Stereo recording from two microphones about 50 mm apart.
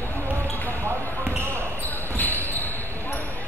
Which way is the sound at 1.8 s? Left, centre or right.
Left.